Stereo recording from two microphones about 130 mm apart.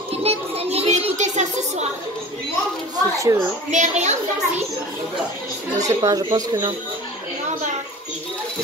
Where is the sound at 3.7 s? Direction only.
65° right (ahead or behind).